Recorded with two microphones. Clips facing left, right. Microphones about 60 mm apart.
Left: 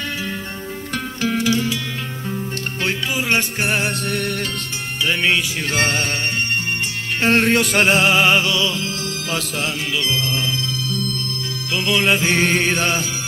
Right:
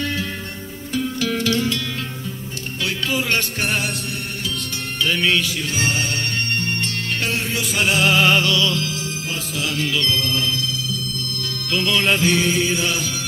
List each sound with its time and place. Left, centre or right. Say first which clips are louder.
1.3 s music: left 3 dB; centre
3.1 s music: right 1 dB; centre
4.1 s music: left 6 dB; left
5.0 s music: left 1 dB; left
5.6 s music: left 3 dB; left
6.5 s music: left 1 dB; centre
7.2 s music: left 13 dB; left
7.9 s music: right 1 dB; left
11.7 s music: left 1 dB; centre
12.4 s music: left 2 dB; left